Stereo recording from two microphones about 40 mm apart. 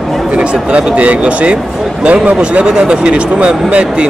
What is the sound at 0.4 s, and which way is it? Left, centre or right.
Speech, right.